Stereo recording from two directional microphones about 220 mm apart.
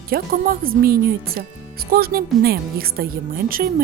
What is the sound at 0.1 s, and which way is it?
Speech, 40° right (ahead or behind).